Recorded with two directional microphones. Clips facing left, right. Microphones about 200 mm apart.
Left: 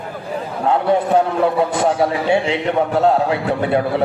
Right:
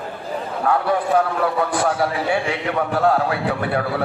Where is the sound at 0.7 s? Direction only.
20° left (ahead or behind).